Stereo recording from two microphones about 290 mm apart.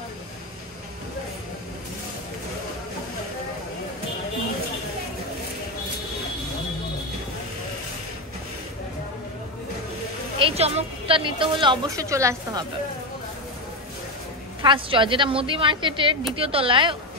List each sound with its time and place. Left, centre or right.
10.4 s a woman's voice: centre
14.6 s a woman's voice: centre